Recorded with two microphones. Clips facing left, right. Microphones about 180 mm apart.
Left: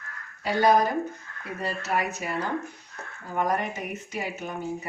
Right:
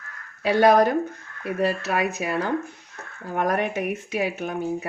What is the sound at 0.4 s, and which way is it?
Speech, 75° right (ahead or behind).